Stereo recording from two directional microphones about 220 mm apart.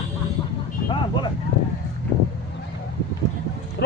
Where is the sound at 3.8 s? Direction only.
50° left (ahead or behind).